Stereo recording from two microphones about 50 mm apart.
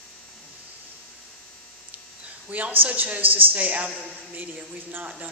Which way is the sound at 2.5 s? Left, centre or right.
Right.